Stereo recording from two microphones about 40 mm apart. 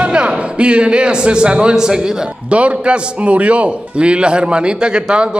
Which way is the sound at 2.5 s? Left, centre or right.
Right.